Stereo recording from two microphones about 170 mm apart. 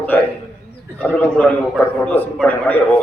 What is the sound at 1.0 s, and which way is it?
A man's voice, 10° left (ahead or behind).